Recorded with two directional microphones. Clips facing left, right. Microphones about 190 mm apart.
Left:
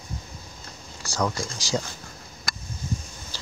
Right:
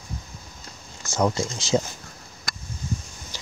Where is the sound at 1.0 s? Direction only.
20° right (ahead or behind).